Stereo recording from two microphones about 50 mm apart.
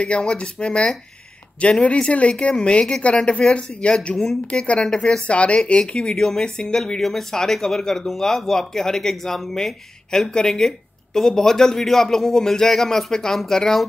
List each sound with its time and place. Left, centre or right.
0.0 s speech: centre
6.1 s speech: centre
6.8 s speech: centre